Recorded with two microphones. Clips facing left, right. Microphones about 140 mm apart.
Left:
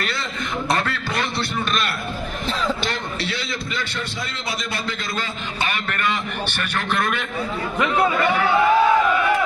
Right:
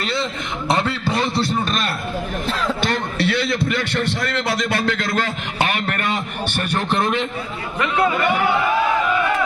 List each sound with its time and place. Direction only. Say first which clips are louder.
0.0 s a sound: right 4 dB; 25° right (ahead or behind); by 1.9 s 40° right (ahead or behind)
2.8 s a man's voice: right 6 dB; 55° right (ahead or behind)
6.7 s a man's voice: right 3 dB; 30° right (ahead or behind)